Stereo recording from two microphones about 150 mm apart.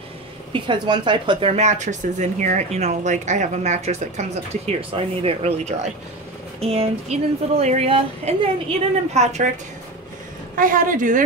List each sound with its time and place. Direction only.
0.5 s a woman's voice: 30° right (ahead or behind)
1.5 s speech: 50° right (ahead or behind)
10.5 s a woman's voice: 65° right (ahead or behind)